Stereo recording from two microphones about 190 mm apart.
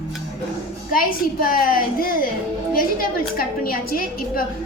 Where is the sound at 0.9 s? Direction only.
45° left (ahead or behind).